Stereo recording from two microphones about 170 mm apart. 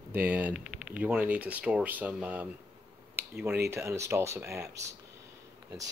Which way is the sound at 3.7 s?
15° right (ahead or behind).